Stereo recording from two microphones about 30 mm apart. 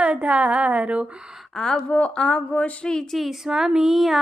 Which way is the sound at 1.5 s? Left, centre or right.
Left.